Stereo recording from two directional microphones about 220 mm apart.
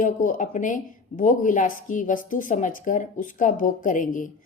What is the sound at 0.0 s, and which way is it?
A woman's voice, 35° left (ahead or behind).